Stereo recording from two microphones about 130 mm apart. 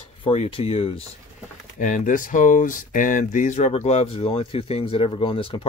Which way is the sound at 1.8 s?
80° left.